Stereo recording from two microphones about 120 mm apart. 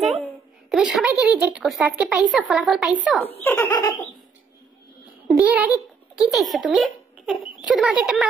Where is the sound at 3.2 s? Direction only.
15° left (ahead or behind).